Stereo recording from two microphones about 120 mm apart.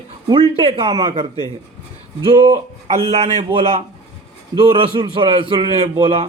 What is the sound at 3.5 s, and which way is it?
Speech, 55° right (ahead or behind).